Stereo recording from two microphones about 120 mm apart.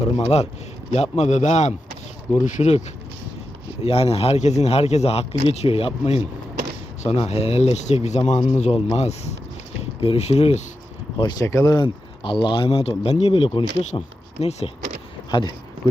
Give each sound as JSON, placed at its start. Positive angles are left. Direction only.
{"t": 0.2, "sound": "a man's voice", "side_deg": 60}
{"t": 3.8, "sound": "speech", "side_deg": 55}
{"t": 8.3, "sound": "speech", "side_deg": 60}
{"t": 11.2, "sound": "speech", "side_deg": 35}
{"t": 12.2, "sound": "speech", "side_deg": 40}
{"t": 14.4, "sound": "speech", "side_deg": 65}
{"t": 15.3, "sound": "speech", "side_deg": 35}